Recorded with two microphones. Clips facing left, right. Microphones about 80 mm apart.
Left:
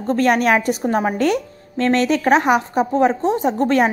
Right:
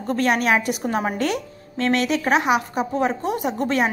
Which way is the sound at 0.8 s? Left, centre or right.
Left.